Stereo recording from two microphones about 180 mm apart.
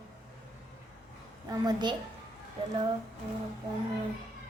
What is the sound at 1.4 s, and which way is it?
Speech, 25° right (ahead or behind).